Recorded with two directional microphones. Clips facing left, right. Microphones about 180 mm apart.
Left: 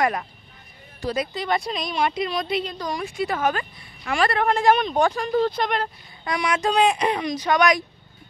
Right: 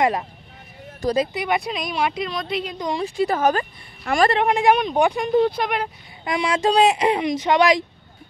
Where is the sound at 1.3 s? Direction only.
10° right (ahead or behind).